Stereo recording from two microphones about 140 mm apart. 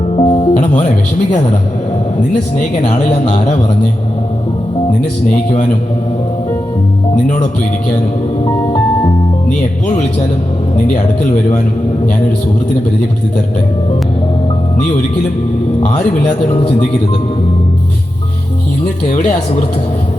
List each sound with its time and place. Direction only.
0.2 s music: 40° left (ahead or behind)
2.8 s a man's voice: 60° left (ahead or behind)
5.5 s a man's voice: 50° left (ahead or behind)